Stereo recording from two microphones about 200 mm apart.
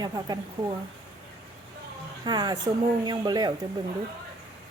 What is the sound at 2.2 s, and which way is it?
A woman's voice, 20° right (ahead or behind).